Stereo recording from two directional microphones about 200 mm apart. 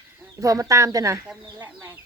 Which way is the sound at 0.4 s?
15° right (ahead or behind).